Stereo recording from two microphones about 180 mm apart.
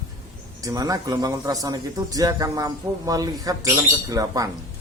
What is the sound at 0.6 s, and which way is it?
A man's voice, 20° right (ahead or behind).